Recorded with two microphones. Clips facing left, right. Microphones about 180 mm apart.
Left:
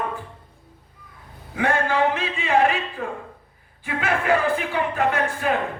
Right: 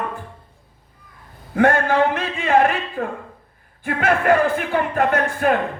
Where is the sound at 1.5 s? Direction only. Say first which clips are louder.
Right 5 dB; 50° right (ahead or behind).